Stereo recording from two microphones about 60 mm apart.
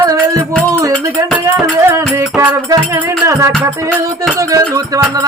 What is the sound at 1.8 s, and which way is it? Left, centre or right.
Music, right.